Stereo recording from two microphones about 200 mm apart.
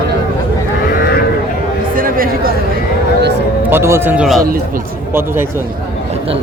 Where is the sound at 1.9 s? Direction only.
45° right (ahead or behind).